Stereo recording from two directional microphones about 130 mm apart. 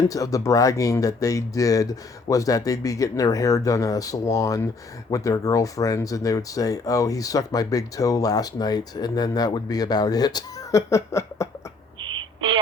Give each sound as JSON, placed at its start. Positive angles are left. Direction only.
{"t": 0.1, "sound": "speech", "side_deg": 25}